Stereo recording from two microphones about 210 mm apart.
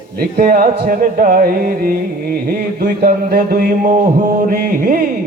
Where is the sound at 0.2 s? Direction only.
45° right (ahead or behind).